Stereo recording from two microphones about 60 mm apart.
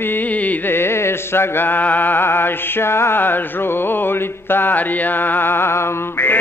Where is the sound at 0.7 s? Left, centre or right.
Left.